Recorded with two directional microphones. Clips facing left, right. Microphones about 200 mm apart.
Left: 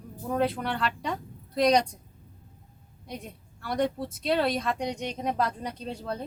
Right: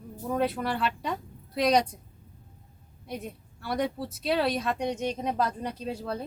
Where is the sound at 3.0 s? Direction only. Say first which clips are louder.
Right 3 dB; 5° right (ahead or behind).